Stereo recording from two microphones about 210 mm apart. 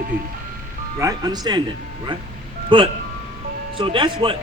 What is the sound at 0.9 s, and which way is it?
Speech, 15° right (ahead or behind).